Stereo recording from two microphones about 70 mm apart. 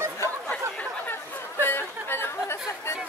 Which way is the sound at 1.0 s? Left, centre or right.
Left.